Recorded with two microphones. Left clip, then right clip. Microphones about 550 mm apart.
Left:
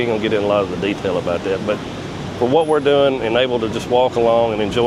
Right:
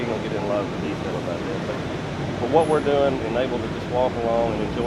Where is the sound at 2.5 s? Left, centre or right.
Left.